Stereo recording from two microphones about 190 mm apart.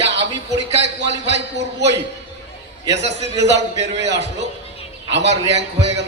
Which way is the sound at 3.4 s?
65° right (ahead or behind).